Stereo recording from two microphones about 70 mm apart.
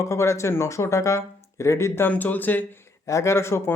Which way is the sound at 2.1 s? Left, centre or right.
Left.